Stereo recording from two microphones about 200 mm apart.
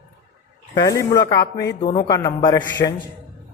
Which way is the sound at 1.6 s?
55° left (ahead or behind).